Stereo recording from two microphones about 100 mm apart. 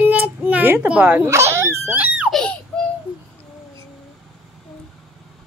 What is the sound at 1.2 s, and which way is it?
Dog, 25° right (ahead or behind).